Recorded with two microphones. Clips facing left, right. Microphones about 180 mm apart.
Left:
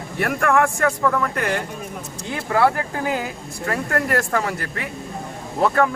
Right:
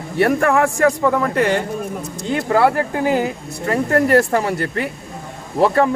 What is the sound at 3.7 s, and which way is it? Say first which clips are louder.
Speech: right 7 dB; 30° right (ahead or behind).